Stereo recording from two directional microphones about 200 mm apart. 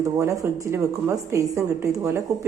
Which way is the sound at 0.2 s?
15° right (ahead or behind).